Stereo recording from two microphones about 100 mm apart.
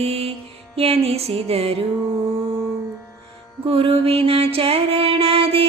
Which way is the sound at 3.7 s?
65° right (ahead or behind).